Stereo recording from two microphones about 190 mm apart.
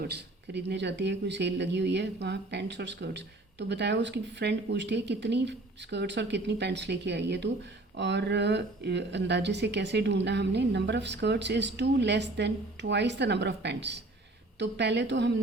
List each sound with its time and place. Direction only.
0.0 s speech: 60° right (ahead or behind)